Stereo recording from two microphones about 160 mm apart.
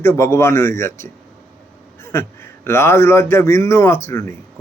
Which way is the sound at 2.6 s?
15° left (ahead or behind).